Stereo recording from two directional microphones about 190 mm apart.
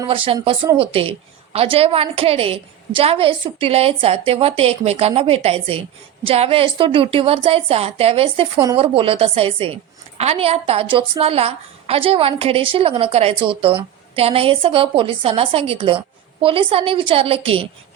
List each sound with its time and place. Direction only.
0.1 s a woman's voice: 30° right (ahead or behind)